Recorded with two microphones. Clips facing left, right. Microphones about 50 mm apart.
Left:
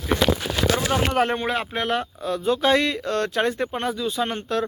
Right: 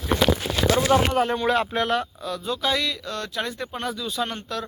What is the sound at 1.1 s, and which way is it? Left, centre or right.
Speech, left.